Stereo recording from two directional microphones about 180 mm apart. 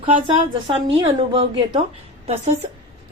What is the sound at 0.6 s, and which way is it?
A woman's voice, 30° right (ahead or behind).